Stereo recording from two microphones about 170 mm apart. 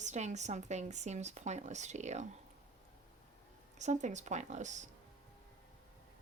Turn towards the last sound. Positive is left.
turn(degrees=-45)  # may be behind; listen again after turning